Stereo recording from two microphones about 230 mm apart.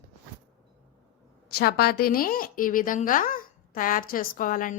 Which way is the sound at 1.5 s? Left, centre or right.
Left.